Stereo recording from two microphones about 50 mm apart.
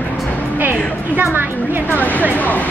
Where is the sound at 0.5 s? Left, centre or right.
Right.